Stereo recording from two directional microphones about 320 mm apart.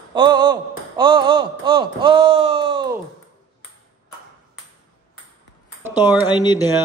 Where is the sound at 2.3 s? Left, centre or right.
Right.